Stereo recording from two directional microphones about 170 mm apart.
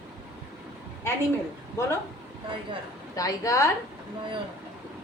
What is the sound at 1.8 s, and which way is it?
Speech, 15° left (ahead or behind).